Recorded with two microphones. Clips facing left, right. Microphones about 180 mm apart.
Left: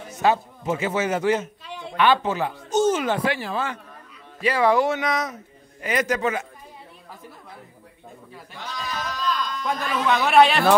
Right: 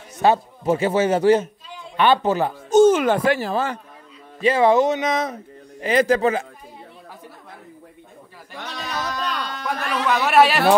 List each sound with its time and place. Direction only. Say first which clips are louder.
0.2 s a man's voice: right 3 dB; 30° right (ahead or behind)
2.8 s speech: right 6 dB; 55° right (ahead or behind); by 3.8 s 40° right (ahead or behind)
4.4 s speech: right 4 dB; 25° right (ahead or behind)
8.5 s a man's voice: right 2 dB; 70° right (ahead or behind)
10.0 s a man's voice: even; centre (ahead or behind)